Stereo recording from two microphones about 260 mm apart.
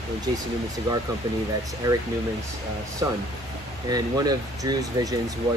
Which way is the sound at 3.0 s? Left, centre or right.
Centre.